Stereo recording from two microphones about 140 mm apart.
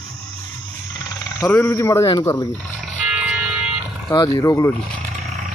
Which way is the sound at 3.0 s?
5° right (ahead or behind).